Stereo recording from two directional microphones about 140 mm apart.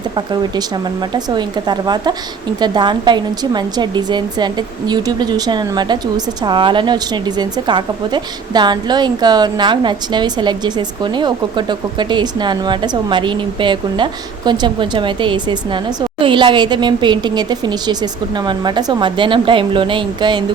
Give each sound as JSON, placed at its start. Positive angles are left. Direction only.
{"t": 1.1, "sound": "a woman's voice", "side_deg": -30}